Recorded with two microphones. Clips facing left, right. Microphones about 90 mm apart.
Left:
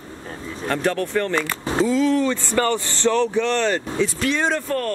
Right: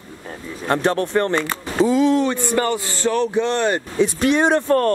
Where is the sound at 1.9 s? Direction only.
20° right (ahead or behind).